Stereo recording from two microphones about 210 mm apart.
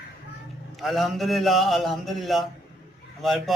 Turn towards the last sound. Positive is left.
turn(degrees=0)  # may be behind; listen again after turning